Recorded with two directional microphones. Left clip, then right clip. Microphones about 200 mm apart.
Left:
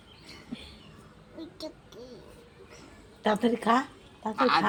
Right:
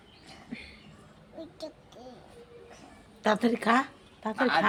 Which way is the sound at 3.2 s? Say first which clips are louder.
Even; 10° right (ahead or behind).